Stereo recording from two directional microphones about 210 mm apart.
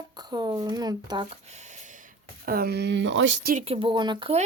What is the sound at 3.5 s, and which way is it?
Speech, 30° right (ahead or behind).